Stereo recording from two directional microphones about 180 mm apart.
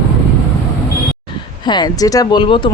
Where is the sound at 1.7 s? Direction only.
20° left (ahead or behind).